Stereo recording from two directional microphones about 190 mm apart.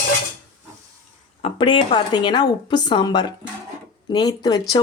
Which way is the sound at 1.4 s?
25° left (ahead or behind).